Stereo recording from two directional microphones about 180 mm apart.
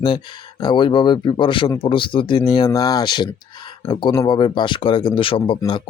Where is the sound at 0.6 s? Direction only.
25° left (ahead or behind).